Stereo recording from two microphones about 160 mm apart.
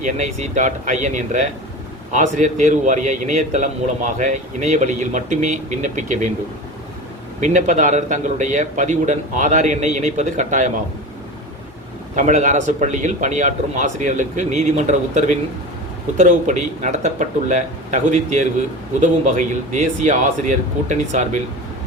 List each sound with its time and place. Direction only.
0.0 s a man's voice: 50° right (ahead or behind)
7.4 s a man's voice: 50° right (ahead or behind)
12.1 s a man's voice: 50° right (ahead or behind)